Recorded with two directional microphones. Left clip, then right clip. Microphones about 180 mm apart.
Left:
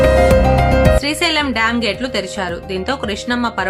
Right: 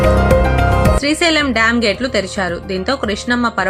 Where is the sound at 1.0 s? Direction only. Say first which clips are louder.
Right 2 dB; 20° right (ahead or behind).